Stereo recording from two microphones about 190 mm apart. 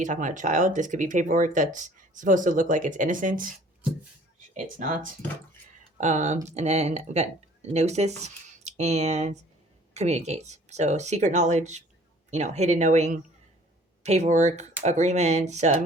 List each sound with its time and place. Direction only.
0.0 s speech: 40° right (ahead or behind)
4.5 s speech: 40° right (ahead or behind)